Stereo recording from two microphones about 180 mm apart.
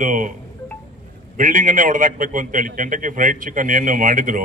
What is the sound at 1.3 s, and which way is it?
A man's voice, 45° right (ahead or behind).